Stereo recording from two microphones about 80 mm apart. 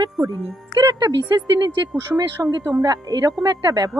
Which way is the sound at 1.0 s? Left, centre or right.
Right.